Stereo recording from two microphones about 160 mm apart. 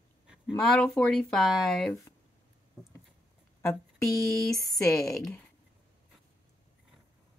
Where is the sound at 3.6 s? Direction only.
15° left (ahead or behind).